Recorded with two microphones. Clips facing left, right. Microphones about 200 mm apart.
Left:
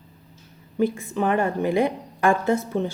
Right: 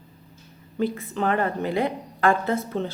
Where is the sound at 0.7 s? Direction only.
15° left (ahead or behind).